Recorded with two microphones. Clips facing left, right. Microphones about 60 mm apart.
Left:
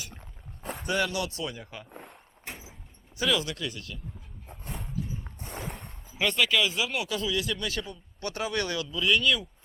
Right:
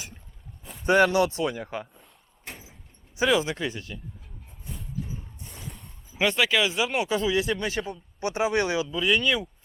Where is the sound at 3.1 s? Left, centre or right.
Right.